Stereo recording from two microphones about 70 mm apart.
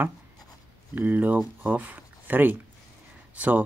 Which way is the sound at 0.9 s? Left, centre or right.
Right.